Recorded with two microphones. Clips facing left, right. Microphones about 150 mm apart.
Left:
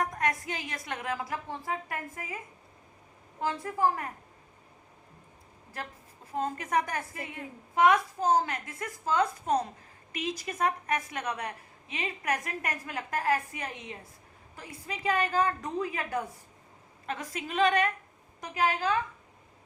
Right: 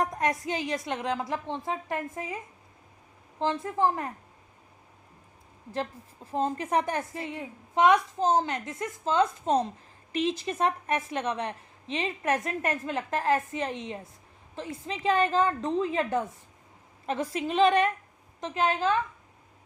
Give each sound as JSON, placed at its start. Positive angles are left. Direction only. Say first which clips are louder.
{"t": 0.0, "sound": "a woman's voice", "louder": "right 3 dB", "side_deg": -25}
{"t": 3.4, "sound": "a woman's voice", "louder": "right 2 dB", "side_deg": -25}
{"t": 6.3, "sound": "a woman's voice", "louder": "right 3 dB", "side_deg": -30}